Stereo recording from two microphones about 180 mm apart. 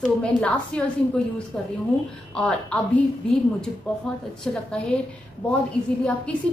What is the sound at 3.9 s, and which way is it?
Speech, 10° left (ahead or behind).